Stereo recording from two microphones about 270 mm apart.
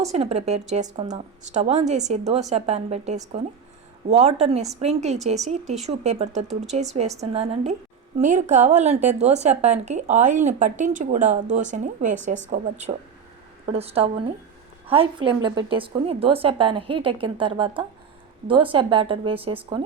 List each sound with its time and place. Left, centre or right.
0.0 s speech: right